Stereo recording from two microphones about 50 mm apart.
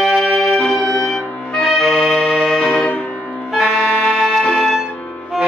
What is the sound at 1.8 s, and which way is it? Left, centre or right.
Accordion, centre.